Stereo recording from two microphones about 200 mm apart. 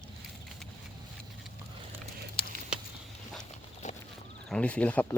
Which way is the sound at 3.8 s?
35° left (ahead or behind).